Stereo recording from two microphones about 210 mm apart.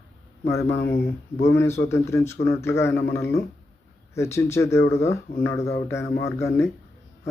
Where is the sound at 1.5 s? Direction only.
10° left (ahead or behind).